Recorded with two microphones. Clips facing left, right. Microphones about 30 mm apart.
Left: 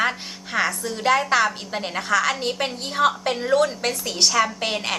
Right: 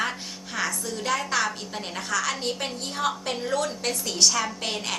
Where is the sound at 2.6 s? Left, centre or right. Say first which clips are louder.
Left 7 dB; left.